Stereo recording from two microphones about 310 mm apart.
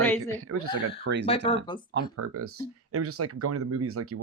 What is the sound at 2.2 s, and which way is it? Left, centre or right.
Speech, right.